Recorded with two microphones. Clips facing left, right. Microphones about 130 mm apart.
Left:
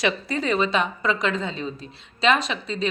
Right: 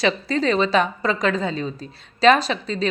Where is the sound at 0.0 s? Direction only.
30° right (ahead or behind).